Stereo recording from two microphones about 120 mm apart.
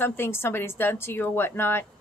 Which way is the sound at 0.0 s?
20° left (ahead or behind).